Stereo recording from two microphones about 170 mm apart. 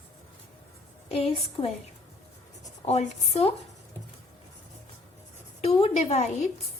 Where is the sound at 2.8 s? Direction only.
40° left (ahead or behind).